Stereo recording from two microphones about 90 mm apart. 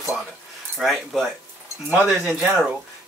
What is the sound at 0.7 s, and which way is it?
Speech, centre (ahead or behind).